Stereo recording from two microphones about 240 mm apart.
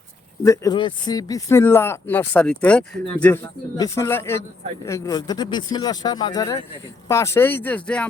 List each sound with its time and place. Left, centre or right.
0.4 s speech: centre